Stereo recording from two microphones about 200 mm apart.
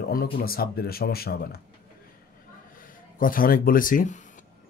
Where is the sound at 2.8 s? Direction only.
45° left (ahead or behind).